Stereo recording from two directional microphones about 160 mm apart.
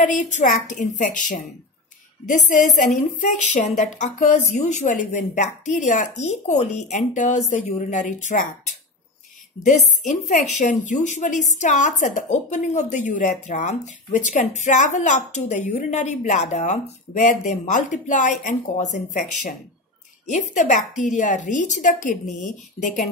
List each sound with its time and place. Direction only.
0.0 s a woman's voice: 50° left (ahead or behind)
9.6 s a woman's voice: 45° left (ahead or behind)